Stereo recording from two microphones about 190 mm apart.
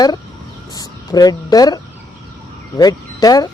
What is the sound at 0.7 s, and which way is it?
A woman's voice, 20° left (ahead or behind).